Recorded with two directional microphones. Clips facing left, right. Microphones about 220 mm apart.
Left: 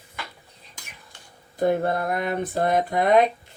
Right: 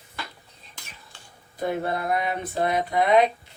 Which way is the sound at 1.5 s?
50° left (ahead or behind).